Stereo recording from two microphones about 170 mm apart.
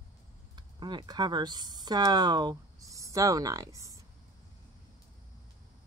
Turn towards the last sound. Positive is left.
turn(degrees=-20)  # may be behind; listen again after turning